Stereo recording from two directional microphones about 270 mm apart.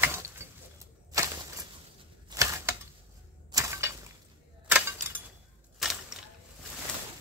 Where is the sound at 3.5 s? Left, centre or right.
Centre.